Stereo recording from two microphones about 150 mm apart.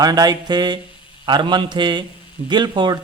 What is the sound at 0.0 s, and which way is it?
A man's voice, 25° right (ahead or behind).